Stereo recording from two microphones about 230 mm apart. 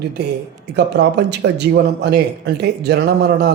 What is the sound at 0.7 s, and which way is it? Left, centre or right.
A man's voice, right.